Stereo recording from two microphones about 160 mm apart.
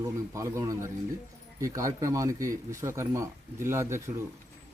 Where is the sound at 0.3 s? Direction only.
20° right (ahead or behind).